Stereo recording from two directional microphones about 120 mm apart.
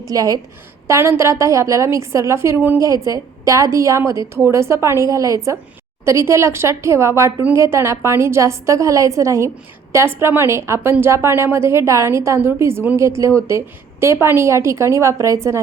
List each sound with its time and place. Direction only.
0.0 s a woman's voice: 30° right (ahead or behind)